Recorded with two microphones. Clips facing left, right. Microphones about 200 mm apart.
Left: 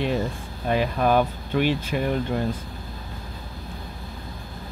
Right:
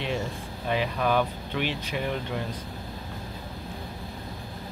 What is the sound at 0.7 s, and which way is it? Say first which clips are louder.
Speech: left 5 dB; 45° left (ahead or behind).